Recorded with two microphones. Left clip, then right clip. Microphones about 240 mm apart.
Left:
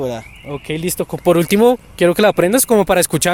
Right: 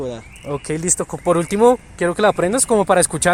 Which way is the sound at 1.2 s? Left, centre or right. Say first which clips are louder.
Left 2 dB; left.